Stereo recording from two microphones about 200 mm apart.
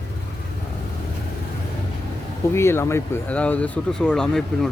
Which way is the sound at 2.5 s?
10° left (ahead or behind).